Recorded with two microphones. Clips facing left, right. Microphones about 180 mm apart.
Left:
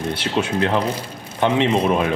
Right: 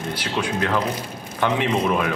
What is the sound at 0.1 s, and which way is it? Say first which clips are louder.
Speech: left 2 dB; 25° left (ahead or behind).